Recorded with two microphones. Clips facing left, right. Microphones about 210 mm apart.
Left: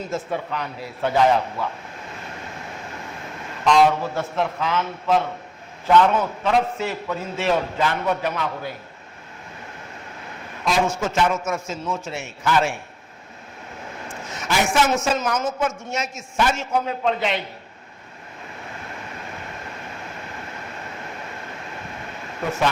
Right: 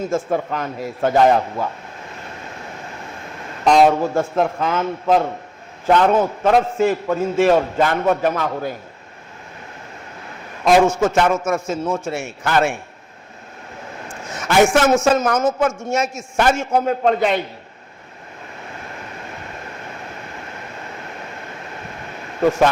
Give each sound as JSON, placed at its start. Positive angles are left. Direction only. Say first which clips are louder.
{"t": 0.1, "sound": "a man's voice", "louder": "right 6 dB", "side_deg": -45}
{"t": 3.7, "sound": "a man's voice", "louder": "right 4 dB", "side_deg": -45}
{"t": 10.7, "sound": "a man's voice", "louder": "right 8 dB", "side_deg": -50}
{"t": 14.4, "sound": "a man's voice", "louder": "right 7 dB", "side_deg": -50}